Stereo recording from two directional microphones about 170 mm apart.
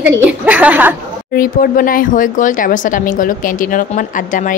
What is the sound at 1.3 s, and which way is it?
Speech, 55° left (ahead or behind).